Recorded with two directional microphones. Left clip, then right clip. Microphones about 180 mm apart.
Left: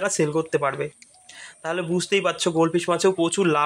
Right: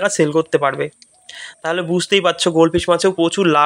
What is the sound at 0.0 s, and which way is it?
Speech, 25° right (ahead or behind).